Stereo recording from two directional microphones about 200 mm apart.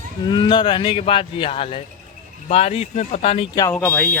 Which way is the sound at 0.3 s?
25° left (ahead or behind).